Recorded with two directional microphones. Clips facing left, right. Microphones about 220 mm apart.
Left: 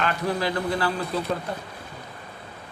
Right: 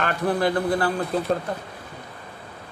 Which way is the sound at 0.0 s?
50° right (ahead or behind).